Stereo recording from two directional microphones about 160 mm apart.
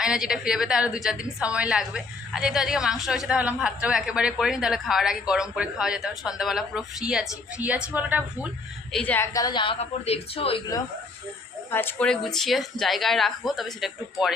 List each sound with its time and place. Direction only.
0.0 s a woman's voice: 5° right (ahead or behind)
8.9 s a woman's voice: 10° left (ahead or behind); by 10.6 s 35° left (ahead or behind)
11.7 s a woman's voice: 15° left (ahead or behind)